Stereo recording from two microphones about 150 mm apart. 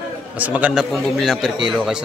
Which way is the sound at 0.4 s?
10° right (ahead or behind).